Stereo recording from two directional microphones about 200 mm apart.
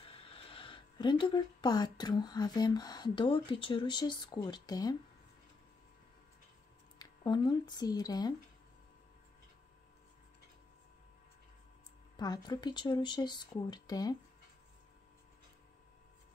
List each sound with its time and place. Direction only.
0.0 s speech: 25° left (ahead or behind)
7.0 s speech: 20° left (ahead or behind)
12.2 s speech: 20° left (ahead or behind)